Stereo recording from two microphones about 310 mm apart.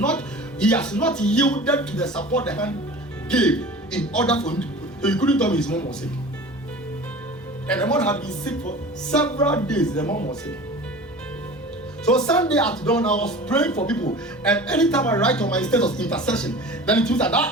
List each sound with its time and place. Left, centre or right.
0.6 s speech: centre
7.7 s speech: centre
10.1 s speech: left
12.2 s speech: centre